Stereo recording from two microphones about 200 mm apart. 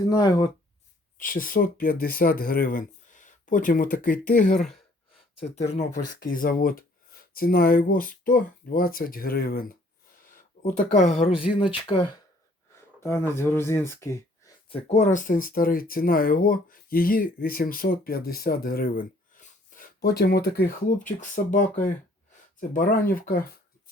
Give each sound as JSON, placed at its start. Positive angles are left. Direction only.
{"t": 0.1, "sound": "speech", "side_deg": 20}
{"t": 1.2, "sound": "speech", "side_deg": 45}
{"t": 4.5, "sound": "speech", "side_deg": 0}
{"t": 5.4, "sound": "speech", "side_deg": 30}
{"t": 10.3, "sound": "a sound", "side_deg": 40}
{"t": 11.6, "sound": "speech", "side_deg": 25}
{"t": 13.0, "sound": "speech", "side_deg": 15}
{"t": 14.7, "sound": "speech", "side_deg": 30}